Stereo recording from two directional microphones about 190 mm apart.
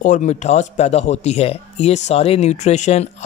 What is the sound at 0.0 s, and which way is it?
Speech, 40° left (ahead or behind).